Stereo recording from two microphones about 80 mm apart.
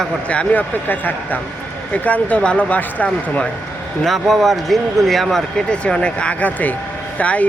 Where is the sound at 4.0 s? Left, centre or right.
Centre.